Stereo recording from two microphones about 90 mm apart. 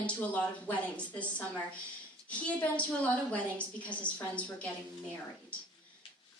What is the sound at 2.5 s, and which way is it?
A woman's voice, 15° left (ahead or behind).